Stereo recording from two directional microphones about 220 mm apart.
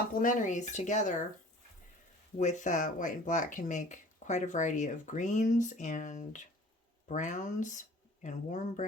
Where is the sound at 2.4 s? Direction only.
35° left (ahead or behind).